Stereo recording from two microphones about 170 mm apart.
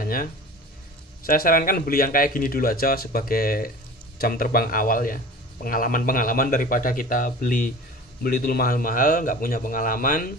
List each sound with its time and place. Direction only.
0.0 s a man's voice: 55° left (ahead or behind)